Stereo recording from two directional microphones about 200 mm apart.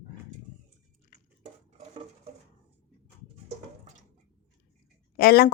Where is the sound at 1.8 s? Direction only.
30° right (ahead or behind).